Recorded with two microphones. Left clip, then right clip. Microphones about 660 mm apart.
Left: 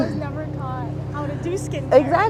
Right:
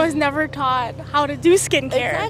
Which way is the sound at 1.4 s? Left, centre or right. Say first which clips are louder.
Right 13 dB; right.